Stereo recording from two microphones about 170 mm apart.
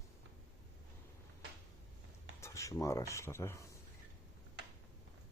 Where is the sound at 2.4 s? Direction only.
20° left (ahead or behind).